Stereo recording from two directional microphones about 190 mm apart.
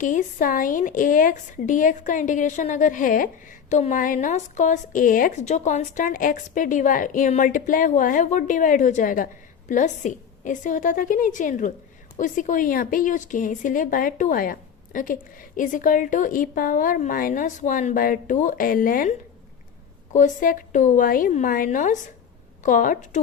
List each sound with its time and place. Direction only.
0.0 s a woman's voice: 40° left (ahead or behind)
20.1 s a woman's voice: 45° left (ahead or behind)